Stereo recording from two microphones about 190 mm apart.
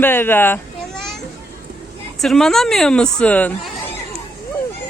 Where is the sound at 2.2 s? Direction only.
Centre (ahead or behind).